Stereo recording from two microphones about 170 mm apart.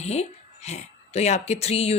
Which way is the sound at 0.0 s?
40° left (ahead or behind).